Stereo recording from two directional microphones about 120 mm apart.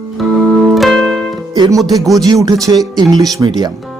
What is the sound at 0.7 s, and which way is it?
Music, centre (ahead or behind).